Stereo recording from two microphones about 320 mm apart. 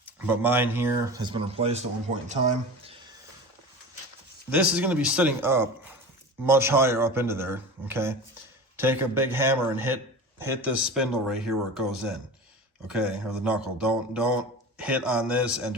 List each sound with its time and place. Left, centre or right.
0.0 s speech: centre; by 2.9 s right
4.4 s speech: centre